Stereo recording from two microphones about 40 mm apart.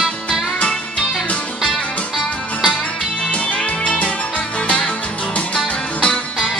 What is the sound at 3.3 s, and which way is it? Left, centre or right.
Music, left.